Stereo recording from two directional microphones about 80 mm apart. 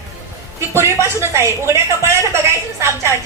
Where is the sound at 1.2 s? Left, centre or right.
Right.